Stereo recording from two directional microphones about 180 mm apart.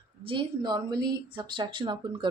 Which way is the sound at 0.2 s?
30° right (ahead or behind).